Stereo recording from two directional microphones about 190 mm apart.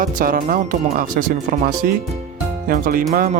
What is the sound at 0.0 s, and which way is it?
Speech, 45° right (ahead or behind).